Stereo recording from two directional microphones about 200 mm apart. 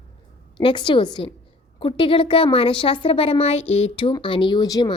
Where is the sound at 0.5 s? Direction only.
25° left (ahead or behind).